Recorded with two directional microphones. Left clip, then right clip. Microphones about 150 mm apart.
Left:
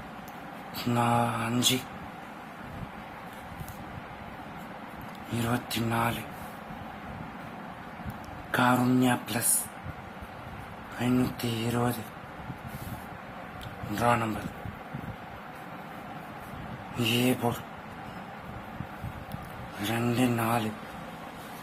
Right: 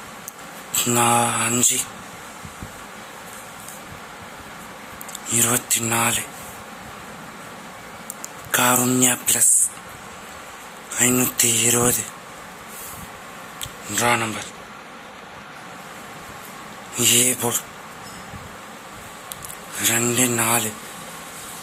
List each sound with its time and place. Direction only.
0.9 s speech: 15° right (ahead or behind)
5.5 s speech: 15° right (ahead or behind)
8.5 s speech: 20° right (ahead or behind)
10.9 s speech: 20° right (ahead or behind)
13.9 s speech: 15° right (ahead or behind)
17.0 s speech: 5° right (ahead or behind)
19.8 s speech: 10° right (ahead or behind)